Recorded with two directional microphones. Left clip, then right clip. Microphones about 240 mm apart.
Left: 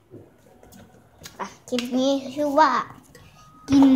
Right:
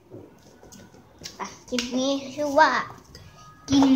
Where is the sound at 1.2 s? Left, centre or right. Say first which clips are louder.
Left 1 dB; centre.